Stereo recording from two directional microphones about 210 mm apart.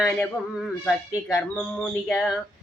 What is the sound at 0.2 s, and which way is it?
Speech, centre (ahead or behind).